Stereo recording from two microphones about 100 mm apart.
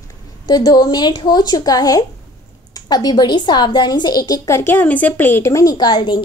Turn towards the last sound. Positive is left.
turn(degrees=45)  # may be behind; listen again after turning